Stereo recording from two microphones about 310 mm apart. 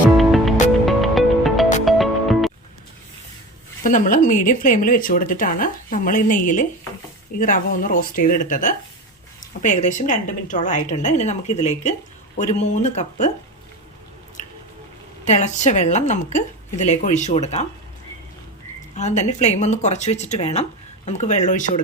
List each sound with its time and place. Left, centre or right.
0.2 s music: centre
3.8 s a woman's voice: left
15.2 s a woman's voice: left
18.9 s a woman's voice: left